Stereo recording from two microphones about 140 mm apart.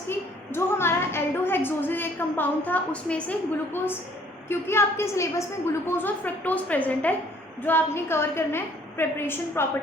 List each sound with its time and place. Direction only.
0.1 s a woman's voice: 15° left (ahead or behind)